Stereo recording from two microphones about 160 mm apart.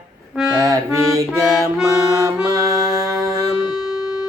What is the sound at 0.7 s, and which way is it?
Music, 20° right (ahead or behind).